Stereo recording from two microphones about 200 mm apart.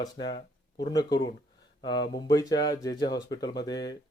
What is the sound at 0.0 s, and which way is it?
Speech, 20° left (ahead or behind).